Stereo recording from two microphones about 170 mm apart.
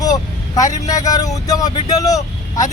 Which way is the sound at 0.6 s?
45° left (ahead or behind).